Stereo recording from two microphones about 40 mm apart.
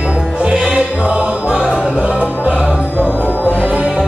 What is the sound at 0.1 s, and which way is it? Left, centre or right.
Music, right.